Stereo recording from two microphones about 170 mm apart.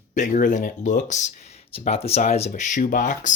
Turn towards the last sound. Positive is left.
turn(degrees=50)  # may be behind; listen again after turning